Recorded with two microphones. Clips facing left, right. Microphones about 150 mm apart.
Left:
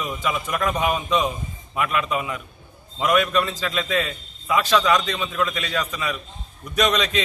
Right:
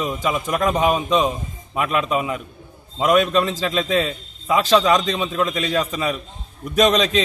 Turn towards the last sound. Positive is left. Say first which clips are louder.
# right 5 dB
turn(degrees=-25)  # may be behind; listen again after turning